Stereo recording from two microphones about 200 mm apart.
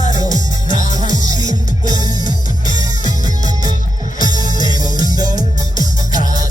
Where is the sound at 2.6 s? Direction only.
40° left (ahead or behind).